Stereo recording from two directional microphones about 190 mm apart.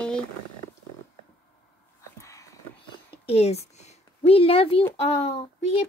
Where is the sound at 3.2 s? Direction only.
30° left (ahead or behind).